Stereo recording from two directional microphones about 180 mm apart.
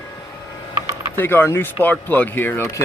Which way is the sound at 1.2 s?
10° left (ahead or behind).